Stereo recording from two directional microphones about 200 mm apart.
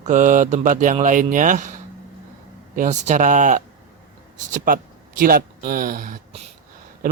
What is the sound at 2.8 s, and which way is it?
Mantra, 35° right (ahead or behind).